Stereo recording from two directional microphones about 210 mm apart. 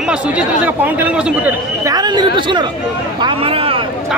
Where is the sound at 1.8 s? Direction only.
20° right (ahead or behind).